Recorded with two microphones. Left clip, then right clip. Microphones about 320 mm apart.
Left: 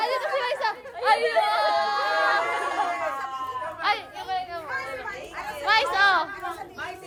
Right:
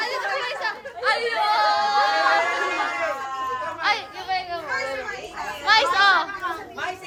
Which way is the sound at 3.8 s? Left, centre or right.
Centre.